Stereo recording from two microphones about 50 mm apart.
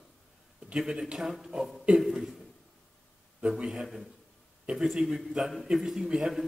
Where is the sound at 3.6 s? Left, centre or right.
Centre.